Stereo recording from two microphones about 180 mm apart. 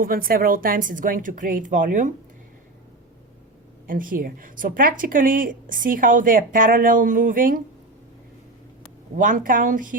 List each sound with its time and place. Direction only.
0.0 s a woman's voice: 55° right (ahead or behind)
3.8 s a woman's voice: 50° right (ahead or behind)
9.1 s a woman's voice: 50° right (ahead or behind)